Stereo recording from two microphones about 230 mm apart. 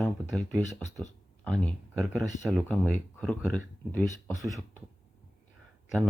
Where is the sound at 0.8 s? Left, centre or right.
Left.